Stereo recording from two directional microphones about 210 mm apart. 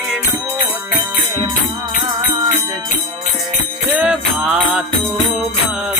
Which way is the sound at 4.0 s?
5° right (ahead or behind).